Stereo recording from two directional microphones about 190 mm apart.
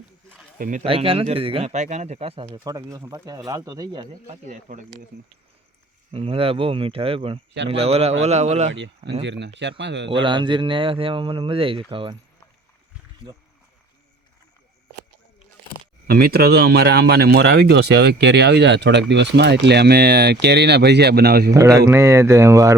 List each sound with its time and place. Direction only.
0.6 s speech: 45° right (ahead or behind)
0.9 s speech: 30° right (ahead or behind)
2.6 s speech: 20° right (ahead or behind)
4.3 s speech: 40° right (ahead or behind)
6.1 s speech: 30° right (ahead or behind)
9.2 s speech: 65° right (ahead or behind)
10.2 s speech: 25° right (ahead or behind)
16.0 s speech: 55° right (ahead or behind)
21.5 s speech: 15° right (ahead or behind)